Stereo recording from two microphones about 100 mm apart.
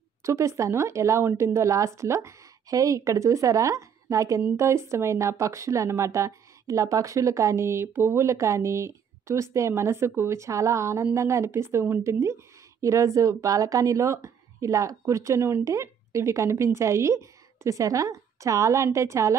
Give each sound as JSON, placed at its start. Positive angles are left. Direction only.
{"t": 0.2, "sound": "speech", "side_deg": -30}